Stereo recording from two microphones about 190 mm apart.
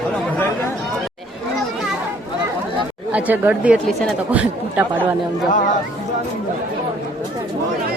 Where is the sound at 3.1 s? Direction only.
10° right (ahead or behind).